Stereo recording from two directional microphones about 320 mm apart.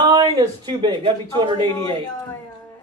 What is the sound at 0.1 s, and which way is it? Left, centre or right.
Speech, centre.